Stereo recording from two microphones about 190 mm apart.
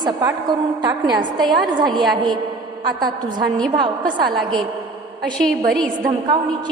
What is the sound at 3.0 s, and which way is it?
A woman's voice, 25° right (ahead or behind).